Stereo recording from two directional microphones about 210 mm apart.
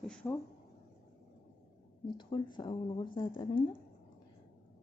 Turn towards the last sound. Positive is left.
turn(degrees=20)  # may be behind; listen again after turning